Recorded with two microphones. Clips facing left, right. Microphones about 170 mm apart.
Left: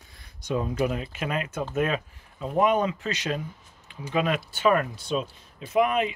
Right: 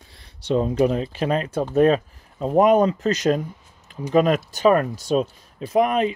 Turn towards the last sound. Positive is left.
turn(degrees=-35)  # may be behind; listen again after turning